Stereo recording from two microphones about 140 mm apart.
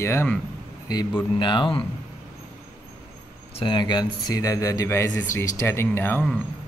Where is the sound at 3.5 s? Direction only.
35° left (ahead or behind); by 5.2 s 20° left (ahead or behind).